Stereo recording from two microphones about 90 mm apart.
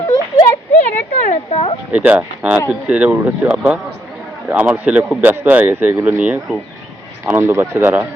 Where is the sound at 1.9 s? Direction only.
15° right (ahead or behind).